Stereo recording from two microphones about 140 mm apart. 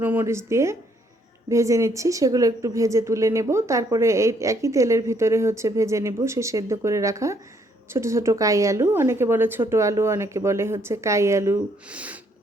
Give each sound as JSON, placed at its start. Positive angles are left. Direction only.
{"t": 0.0, "sound": "a woman's voice", "side_deg": -15}